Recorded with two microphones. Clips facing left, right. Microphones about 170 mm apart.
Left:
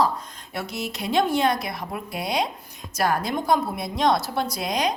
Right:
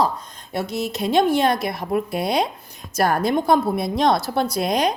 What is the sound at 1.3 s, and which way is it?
Speech, 55° right (ahead or behind).